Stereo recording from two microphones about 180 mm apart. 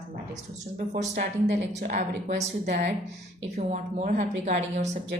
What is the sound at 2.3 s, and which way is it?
Speech, 60° right (ahead or behind).